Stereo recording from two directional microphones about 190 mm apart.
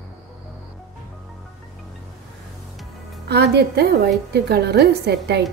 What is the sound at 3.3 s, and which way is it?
A woman's voice, 60° right (ahead or behind).